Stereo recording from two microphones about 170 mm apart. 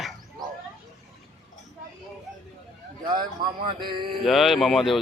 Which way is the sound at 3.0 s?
25° right (ahead or behind).